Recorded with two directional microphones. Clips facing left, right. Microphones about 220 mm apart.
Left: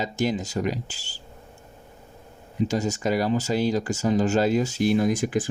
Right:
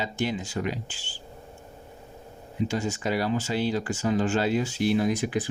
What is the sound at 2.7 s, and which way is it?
Speech, 40° left (ahead or behind).